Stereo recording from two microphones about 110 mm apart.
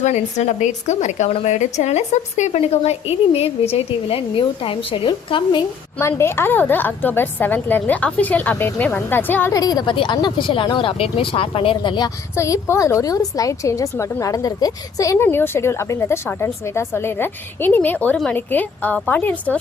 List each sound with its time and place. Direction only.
0.0 s a woman's voice: 90° left; by 5.6 s 45° left (ahead or behind)
6.0 s a woman's voice: 25° left (ahead or behind)
9.5 s speech: 35° left (ahead or behind)
12.4 s a woman's voice: 25° left (ahead or behind)